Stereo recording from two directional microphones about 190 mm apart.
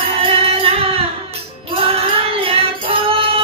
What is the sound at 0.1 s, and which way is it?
Music, 30° right (ahead or behind).